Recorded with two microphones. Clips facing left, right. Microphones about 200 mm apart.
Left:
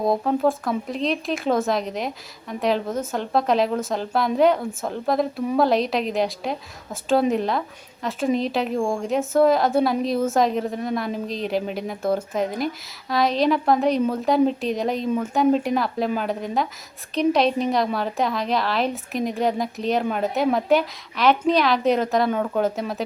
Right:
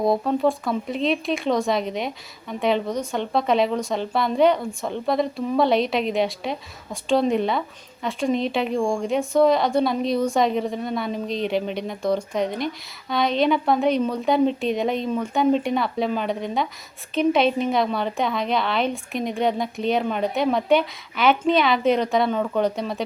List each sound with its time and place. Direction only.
0.0 s speech: centre (ahead or behind)